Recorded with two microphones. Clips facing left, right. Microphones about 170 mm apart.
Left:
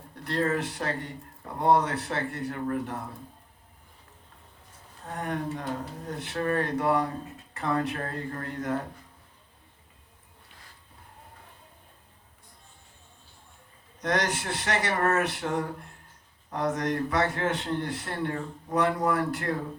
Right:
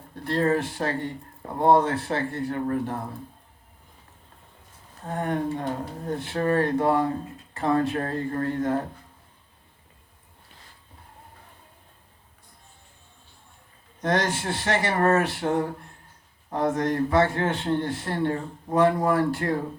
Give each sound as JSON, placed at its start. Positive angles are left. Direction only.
{"t": 0.3, "sound": "a man's voice", "side_deg": -30}
{"t": 5.1, "sound": "a man's voice", "side_deg": -30}
{"t": 14.0, "sound": "a man's voice", "side_deg": -30}